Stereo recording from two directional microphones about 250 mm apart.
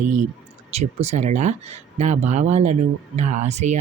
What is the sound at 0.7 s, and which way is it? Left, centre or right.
Speech, right.